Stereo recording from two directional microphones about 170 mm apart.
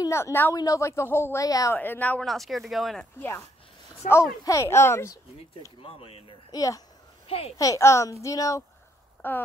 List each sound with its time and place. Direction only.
0.0 s a woman's voice: 15° left (ahead or behind)
4.0 s speech: 50° left (ahead or behind)
4.5 s a woman's voice: 15° left (ahead or behind)
5.8 s speech: 35° left (ahead or behind)
6.5 s a child's voice: 20° left (ahead or behind)
7.2 s a child's voice: 35° left (ahead or behind)
7.5 s a child's voice: 20° left (ahead or behind)